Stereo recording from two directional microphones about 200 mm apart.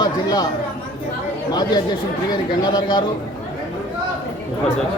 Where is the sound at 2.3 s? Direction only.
20° left (ahead or behind).